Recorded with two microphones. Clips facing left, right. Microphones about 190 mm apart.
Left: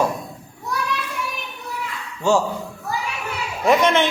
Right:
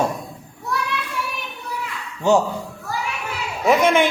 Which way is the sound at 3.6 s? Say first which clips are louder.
Right 1 dB; 10° right (ahead or behind).